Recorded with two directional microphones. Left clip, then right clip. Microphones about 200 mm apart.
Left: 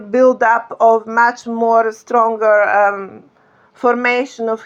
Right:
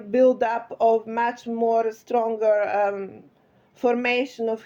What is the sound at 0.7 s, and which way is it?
Speech, 15° left (ahead or behind).